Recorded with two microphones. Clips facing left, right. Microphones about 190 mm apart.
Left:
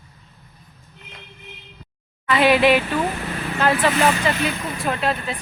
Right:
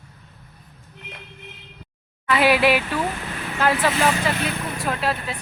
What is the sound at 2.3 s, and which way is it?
Speech, 5° right (ahead or behind).